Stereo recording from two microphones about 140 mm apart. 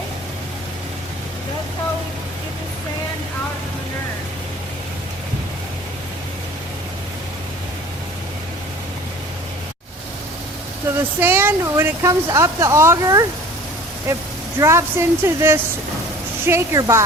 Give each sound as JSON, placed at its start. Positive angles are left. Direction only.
{"t": 11.2, "sound": "speech", "side_deg": -15}
{"t": 14.6, "sound": "speech", "side_deg": -20}